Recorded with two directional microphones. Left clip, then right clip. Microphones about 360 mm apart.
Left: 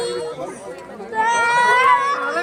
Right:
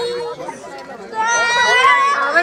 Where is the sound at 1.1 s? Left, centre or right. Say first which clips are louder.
Right 1 dB; left.